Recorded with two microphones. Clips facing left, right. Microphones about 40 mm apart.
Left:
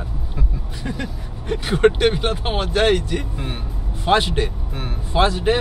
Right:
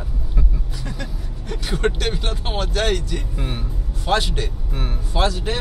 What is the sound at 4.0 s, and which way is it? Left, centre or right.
Speech, left.